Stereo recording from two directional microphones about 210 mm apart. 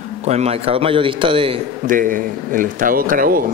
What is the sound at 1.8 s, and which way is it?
A man's voice, 40° right (ahead or behind).